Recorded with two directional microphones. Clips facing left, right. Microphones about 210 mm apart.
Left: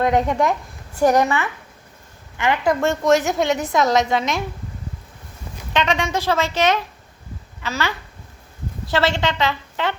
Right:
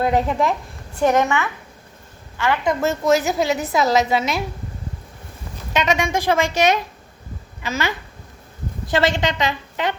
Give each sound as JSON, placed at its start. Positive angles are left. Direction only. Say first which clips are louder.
{"t": 0.0, "sound": "a woman's voice", "louder": "left 1 dB", "side_deg": -5}
{"t": 1.2, "sound": "speech", "louder": "even", "side_deg": 15}
{"t": 2.8, "sound": "a woman's voice", "louder": "even", "side_deg": -5}
{"t": 5.7, "sound": "a woman's voice", "louder": "right 1 dB", "side_deg": -10}